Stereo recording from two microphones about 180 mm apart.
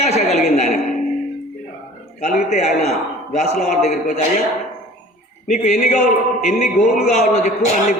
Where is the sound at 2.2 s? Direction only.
40° left (ahead or behind).